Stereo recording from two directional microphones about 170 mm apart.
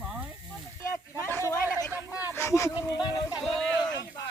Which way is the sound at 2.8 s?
20° left (ahead or behind).